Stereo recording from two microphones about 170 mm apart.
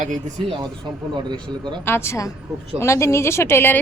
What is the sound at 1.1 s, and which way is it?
Speech, 25° right (ahead or behind).